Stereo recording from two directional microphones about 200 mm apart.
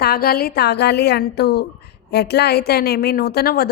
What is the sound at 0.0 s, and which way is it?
A woman's voice, 50° left (ahead or behind).